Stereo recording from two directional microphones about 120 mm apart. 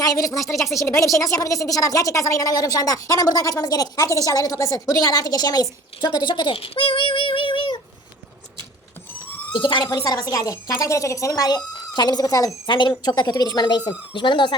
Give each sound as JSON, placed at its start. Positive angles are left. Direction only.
{"t": 0.0, "sound": "a woman's voice", "side_deg": 30}
{"t": 9.5, "sound": "a woman's voice", "side_deg": 40}